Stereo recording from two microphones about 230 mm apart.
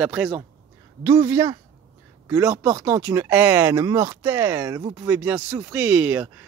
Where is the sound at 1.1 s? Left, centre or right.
Centre.